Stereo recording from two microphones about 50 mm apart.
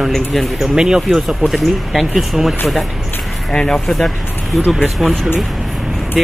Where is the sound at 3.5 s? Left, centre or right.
Centre.